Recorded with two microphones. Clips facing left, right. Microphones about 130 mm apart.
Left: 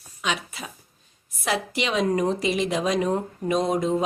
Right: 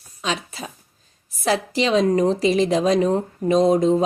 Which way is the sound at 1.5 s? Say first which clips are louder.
Right 6 dB; 35° right (ahead or behind).